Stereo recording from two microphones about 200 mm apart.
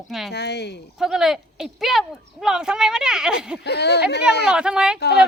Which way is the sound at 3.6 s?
55° left (ahead or behind).